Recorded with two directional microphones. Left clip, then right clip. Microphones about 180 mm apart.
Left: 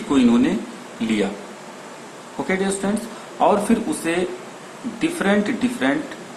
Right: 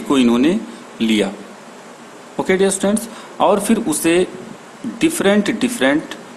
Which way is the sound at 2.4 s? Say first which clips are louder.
Right 7 dB; 65° right (ahead or behind).